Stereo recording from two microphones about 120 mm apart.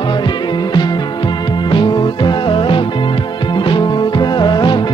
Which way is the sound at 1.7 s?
40° left (ahead or behind).